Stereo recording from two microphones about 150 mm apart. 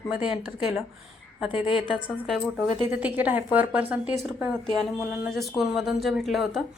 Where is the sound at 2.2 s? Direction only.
Centre (ahead or behind).